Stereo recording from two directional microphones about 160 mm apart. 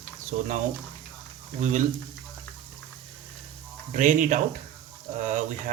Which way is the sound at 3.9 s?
55° right (ahead or behind).